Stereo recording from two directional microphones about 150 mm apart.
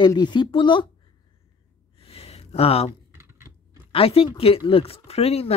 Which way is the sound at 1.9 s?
40° left (ahead or behind).